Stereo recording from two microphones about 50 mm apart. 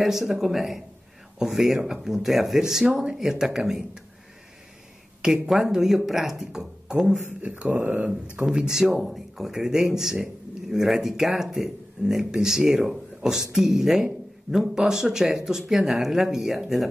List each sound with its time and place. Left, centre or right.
0.0 s speech: centre
5.5 s speech: centre
7.4 s a sound: right
7.7 s speech: right
8.5 s speech: centre